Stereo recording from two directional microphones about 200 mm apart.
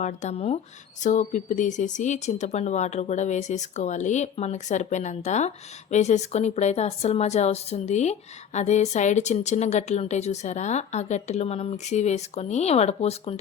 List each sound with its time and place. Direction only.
0.0 s a woman's voice: 35° left (ahead or behind)